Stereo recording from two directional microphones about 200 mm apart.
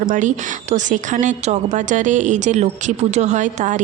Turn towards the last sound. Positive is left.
turn(degrees=-40)  # may be behind; listen again after turning